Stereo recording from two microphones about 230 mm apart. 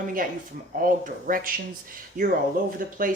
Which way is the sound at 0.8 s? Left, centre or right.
Right.